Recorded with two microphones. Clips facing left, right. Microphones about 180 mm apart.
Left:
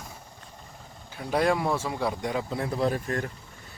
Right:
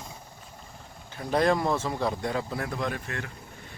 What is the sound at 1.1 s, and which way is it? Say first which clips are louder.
Speech: right 1 dB; 10° left (ahead or behind).